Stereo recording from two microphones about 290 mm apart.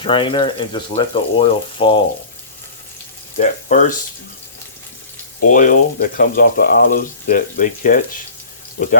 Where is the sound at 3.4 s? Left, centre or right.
Left.